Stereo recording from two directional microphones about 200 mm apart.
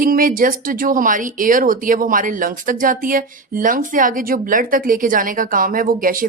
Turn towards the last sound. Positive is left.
turn(degrees=-45)  # may be behind; listen again after turning